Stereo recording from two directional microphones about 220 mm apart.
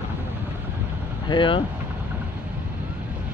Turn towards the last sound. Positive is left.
turn(degrees=20)  # may be behind; listen again after turning